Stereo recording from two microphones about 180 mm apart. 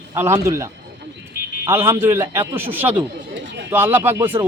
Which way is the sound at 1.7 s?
15° right (ahead or behind).